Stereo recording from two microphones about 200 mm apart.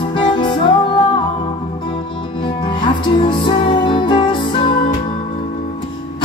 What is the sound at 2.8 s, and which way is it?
Music, 25° left (ahead or behind).